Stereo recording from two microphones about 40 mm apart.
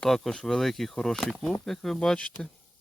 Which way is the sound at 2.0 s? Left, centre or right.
Left.